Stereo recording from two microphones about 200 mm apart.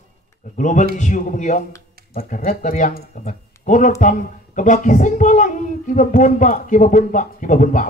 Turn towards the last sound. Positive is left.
turn(degrees=40)  # may be behind; listen again after turning